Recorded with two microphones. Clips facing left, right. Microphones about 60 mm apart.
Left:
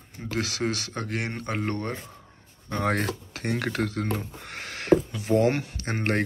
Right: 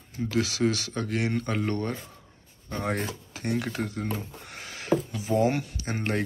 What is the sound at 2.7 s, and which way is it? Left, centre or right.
Speech, left.